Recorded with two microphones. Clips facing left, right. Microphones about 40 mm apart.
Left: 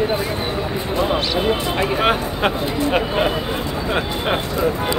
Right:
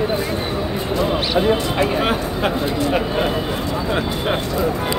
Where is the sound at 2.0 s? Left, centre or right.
Left.